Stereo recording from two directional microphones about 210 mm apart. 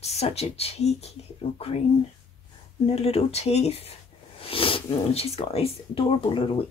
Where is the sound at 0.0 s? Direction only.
30° left (ahead or behind).